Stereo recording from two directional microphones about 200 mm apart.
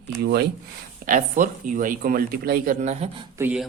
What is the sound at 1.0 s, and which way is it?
Speech, 40° right (ahead or behind).